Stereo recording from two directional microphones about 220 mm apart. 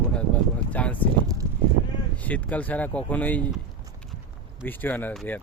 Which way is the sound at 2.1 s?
5° left (ahead or behind).